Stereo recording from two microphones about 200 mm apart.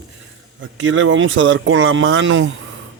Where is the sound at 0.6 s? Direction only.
70° right (ahead or behind).